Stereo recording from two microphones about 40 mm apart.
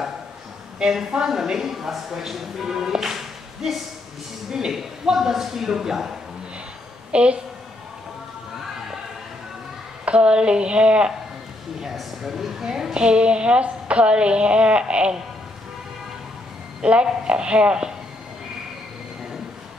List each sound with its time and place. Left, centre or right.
0.8 s speech: centre
7.1 s a woman's voice: right
10.0 s a woman's voice: right
11.8 s speech: centre
13.0 s a woman's voice: right
16.8 s a woman's voice: right